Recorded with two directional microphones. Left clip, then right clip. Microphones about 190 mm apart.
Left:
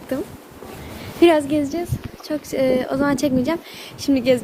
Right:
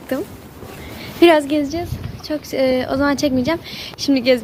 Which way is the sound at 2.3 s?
25° left (ahead or behind).